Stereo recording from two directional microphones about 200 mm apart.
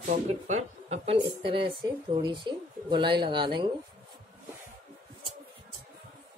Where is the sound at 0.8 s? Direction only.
30° right (ahead or behind).